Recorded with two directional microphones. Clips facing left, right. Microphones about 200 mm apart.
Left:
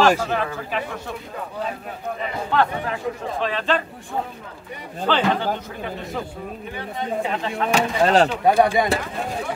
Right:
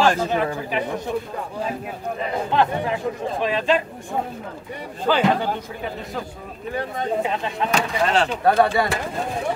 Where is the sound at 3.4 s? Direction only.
15° right (ahead or behind).